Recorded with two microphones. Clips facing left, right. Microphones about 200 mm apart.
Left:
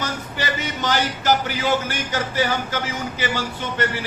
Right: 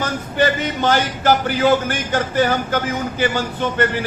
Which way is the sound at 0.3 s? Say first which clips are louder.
Right 10 dB; 50° right (ahead or behind).